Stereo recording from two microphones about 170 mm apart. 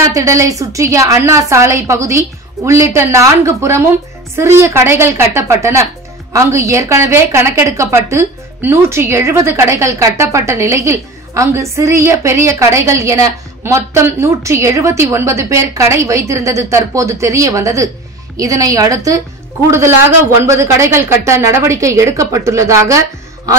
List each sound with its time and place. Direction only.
0.0 s a woman's voice: 20° right (ahead or behind)
20.4 s a woman's voice: 15° right (ahead or behind)